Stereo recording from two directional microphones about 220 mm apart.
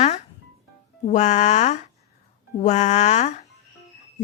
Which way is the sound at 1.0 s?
30° left (ahead or behind).